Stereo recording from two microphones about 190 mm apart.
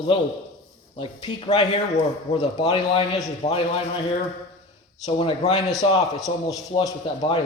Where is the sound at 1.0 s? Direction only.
25° left (ahead or behind).